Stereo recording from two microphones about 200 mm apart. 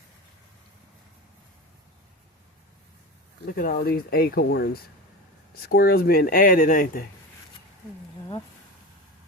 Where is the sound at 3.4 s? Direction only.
45° left (ahead or behind).